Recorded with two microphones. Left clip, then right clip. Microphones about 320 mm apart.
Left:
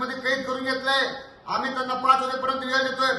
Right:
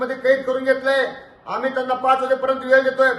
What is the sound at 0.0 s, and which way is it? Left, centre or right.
A man's voice, centre.